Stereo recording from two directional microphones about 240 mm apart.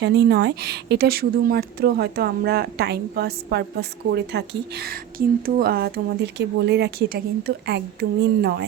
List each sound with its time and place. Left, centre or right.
0.0 s a woman's voice: right